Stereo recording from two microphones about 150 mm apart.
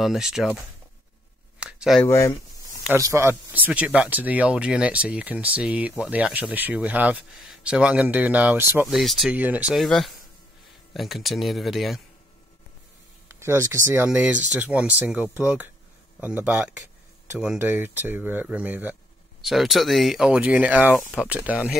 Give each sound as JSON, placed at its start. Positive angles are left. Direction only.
{"t": 0.0, "sound": "speech", "side_deg": -5}
{"t": 1.6, "sound": "a sound", "side_deg": -5}
{"t": 2.0, "sound": "speech", "side_deg": 20}
{"t": 3.0, "sound": "speech", "side_deg": -20}
{"t": 8.8, "sound": "speech", "side_deg": 0}
{"t": 13.3, "sound": "speech", "side_deg": -20}
{"t": 14.5, "sound": "speech", "side_deg": -10}
{"t": 19.4, "sound": "speech", "side_deg": 0}